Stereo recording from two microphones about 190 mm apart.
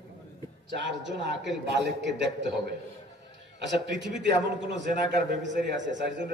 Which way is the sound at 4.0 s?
65° right (ahead or behind).